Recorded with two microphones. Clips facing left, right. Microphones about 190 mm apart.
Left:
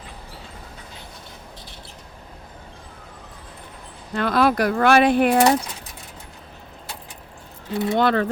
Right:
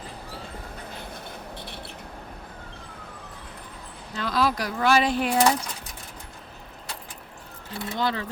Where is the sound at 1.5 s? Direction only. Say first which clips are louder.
Right 4 dB; 60° right (ahead or behind).